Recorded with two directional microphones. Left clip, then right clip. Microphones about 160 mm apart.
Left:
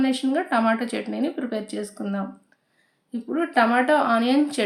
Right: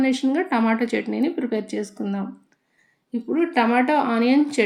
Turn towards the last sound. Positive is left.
turn(degrees=-15)  # may be behind; listen again after turning